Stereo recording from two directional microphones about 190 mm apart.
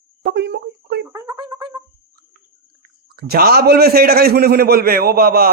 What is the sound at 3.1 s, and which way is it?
A man's voice, 55° right (ahead or behind).